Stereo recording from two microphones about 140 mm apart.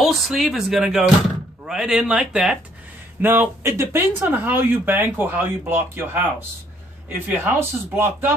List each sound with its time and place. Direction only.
0.0 s speech: centre (ahead or behind); by 8.3 s 15° right (ahead or behind)